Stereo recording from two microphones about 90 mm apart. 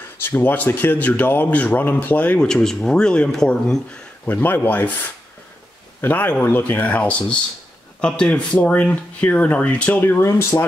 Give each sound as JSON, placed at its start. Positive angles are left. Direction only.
{"t": 0.2, "sound": "speech", "side_deg": 25}
{"t": 4.4, "sound": "speech", "side_deg": 20}
{"t": 5.9, "sound": "speech", "side_deg": 20}
{"t": 10.0, "sound": "speech", "side_deg": 30}